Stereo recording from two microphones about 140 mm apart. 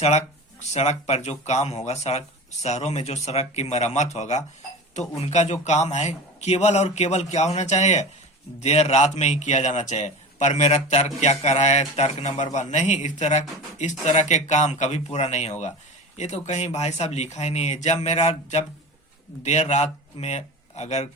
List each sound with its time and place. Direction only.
0.0 s a man's voice: 55° left (ahead or behind)